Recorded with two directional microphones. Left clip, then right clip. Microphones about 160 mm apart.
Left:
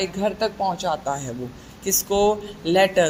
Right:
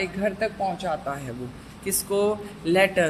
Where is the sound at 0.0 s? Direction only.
20° left (ahead or behind).